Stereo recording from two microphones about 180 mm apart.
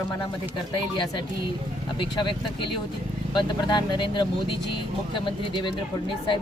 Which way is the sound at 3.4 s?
25° left (ahead or behind).